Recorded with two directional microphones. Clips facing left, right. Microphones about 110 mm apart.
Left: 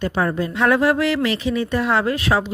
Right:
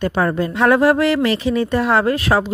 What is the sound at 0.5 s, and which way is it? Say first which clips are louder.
Speech: right 3 dB; 35° right (ahead or behind).